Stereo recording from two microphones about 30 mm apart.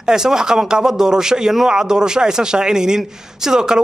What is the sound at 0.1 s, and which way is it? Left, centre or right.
A man's voice, right.